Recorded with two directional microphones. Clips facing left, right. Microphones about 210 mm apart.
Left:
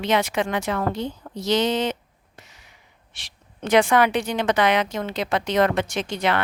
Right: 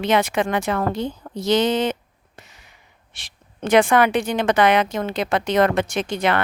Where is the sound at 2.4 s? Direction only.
50° right (ahead or behind).